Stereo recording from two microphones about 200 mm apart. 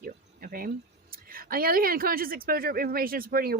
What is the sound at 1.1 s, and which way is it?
Speech, 45° right (ahead or behind).